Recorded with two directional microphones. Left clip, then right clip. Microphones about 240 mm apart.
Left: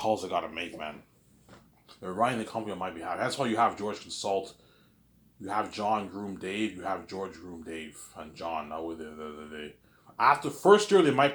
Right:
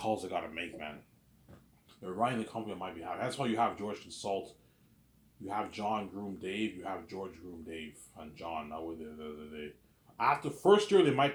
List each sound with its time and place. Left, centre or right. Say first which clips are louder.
0.0 s speech: left 6 dB; centre
2.0 s speech: left 5 dB; centre
5.5 s speech: left 6 dB; centre